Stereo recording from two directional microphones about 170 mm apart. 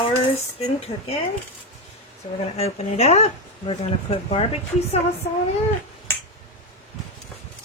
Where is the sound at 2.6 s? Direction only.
40° left (ahead or behind).